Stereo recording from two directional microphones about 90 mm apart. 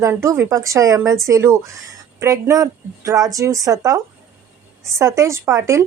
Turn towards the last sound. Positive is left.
turn(degrees=-35)  # may be behind; listen again after turning